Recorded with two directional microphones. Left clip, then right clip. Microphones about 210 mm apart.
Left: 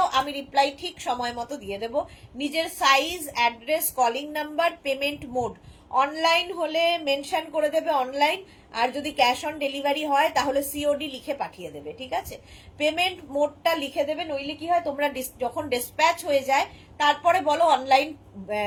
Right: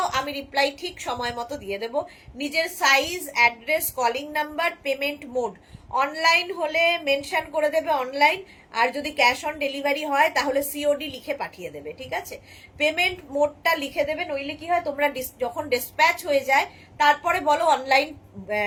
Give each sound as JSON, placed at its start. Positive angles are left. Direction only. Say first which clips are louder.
{"t": 0.0, "sound": "a woman's voice", "louder": "left 2 dB", "side_deg": -20}